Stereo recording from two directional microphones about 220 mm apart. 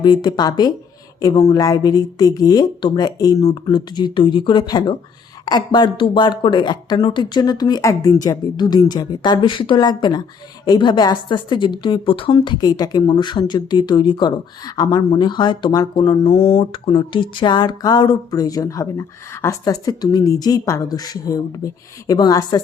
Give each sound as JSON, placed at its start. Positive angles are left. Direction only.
{"t": 0.0, "sound": "a woman's voice", "side_deg": 20}